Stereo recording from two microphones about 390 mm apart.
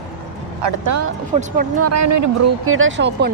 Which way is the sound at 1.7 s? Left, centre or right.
Right.